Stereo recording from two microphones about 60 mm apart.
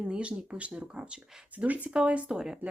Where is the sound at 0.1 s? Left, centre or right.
Centre.